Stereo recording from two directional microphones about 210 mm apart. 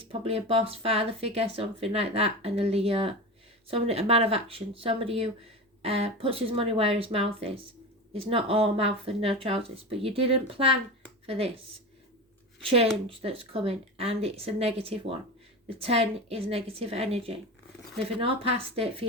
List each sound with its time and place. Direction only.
0.1 s speech: 30° right (ahead or behind)
12.6 s speech: 30° right (ahead or behind)